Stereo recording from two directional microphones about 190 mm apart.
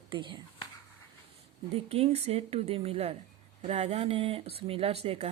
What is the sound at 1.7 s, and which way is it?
A woman's voice, 30° right (ahead or behind).